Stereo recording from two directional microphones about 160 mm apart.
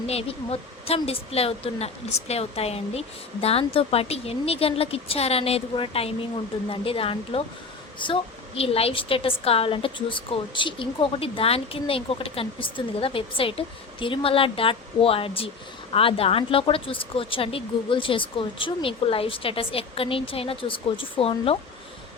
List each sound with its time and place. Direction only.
0.1 s a woman's voice: 40° left (ahead or behind)